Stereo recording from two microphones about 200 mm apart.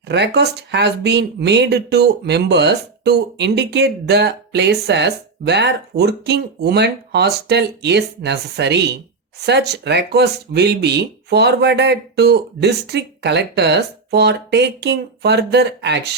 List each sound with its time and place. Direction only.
0.1 s speech: 60° right (ahead or behind)